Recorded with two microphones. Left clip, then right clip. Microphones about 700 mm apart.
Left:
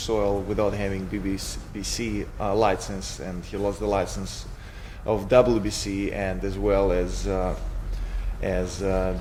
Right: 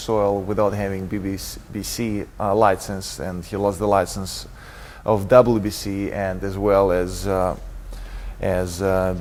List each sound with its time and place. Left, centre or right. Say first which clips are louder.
0.0 s speech: right 4 dB; right